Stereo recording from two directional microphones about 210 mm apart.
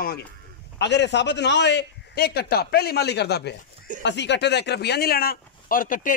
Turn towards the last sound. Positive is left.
turn(degrees=40)  # may be behind; listen again after turning